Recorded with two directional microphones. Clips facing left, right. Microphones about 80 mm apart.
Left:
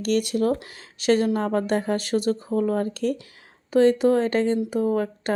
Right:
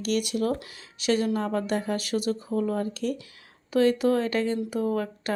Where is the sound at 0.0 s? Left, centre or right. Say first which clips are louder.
Left 4 dB; left.